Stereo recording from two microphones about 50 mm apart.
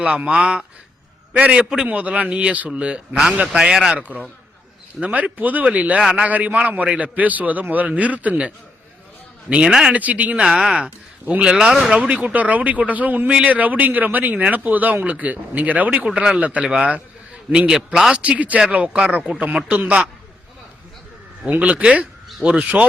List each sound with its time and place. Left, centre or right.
0.0 s a man's voice: right
4.9 s a man's voice: right
9.6 s a man's voice: centre
9.9 s a man's voice: right
10.4 s a man's voice: centre
10.8 s a man's voice: right
11.9 s a man's voice: right
16.0 s a man's voice: centre
16.4 s a man's voice: right
17.7 s a man's voice: centre
18.2 s a man's voice: right
21.6 s a man's voice: right